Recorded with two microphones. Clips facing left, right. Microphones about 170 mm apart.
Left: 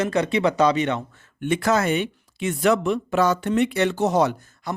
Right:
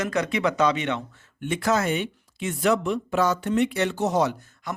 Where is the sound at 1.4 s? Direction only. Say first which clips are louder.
Left 3 dB; 65° left (ahead or behind).